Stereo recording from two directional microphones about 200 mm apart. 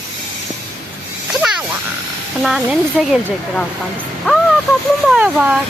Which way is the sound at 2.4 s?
Centre (ahead or behind).